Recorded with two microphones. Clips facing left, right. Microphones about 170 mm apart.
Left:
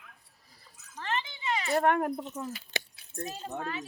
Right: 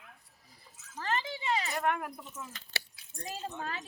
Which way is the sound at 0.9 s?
40° right (ahead or behind).